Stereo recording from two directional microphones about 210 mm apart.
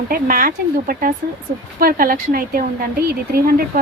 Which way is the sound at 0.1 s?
40° right (ahead or behind).